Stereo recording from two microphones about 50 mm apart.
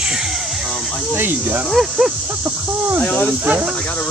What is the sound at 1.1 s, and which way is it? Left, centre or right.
Speech, right.